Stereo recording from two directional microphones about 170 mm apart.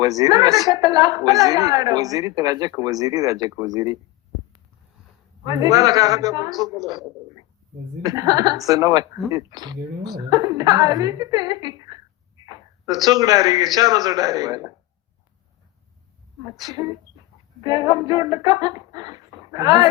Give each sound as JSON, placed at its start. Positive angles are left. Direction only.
{"t": 0.0, "sound": "speech", "side_deg": -20}
{"t": 5.5, "sound": "speech", "side_deg": -20}
{"t": 8.0, "sound": "a man's voice", "side_deg": -20}
{"t": 16.6, "sound": "speech", "side_deg": -20}